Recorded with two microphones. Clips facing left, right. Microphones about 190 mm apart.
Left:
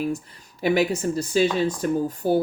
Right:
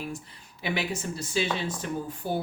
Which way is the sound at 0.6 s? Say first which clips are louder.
Left 10 dB; 45° left (ahead or behind).